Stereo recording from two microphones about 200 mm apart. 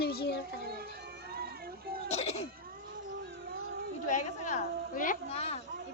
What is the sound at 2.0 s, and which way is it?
Cough, 30° left (ahead or behind).